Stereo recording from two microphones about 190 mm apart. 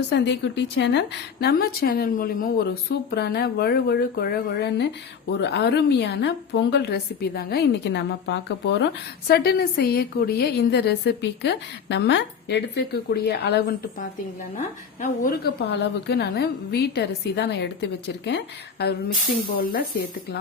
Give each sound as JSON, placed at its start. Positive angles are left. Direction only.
{"t": 0.1, "sound": "a woman's voice", "side_deg": 65}
{"t": 9.2, "sound": "a woman's voice", "side_deg": 55}
{"t": 15.7, "sound": "a woman's voice", "side_deg": 60}